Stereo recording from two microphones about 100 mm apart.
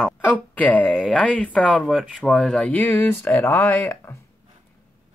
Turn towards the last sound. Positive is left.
turn(degrees=20)  # may be behind; listen again after turning